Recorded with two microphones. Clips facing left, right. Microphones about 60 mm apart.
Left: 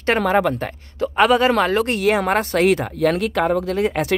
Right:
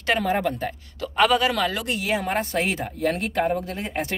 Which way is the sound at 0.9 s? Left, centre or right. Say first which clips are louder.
Left 5 dB; left.